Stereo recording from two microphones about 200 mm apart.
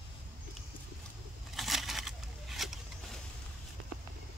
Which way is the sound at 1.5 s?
Centre (ahead or behind).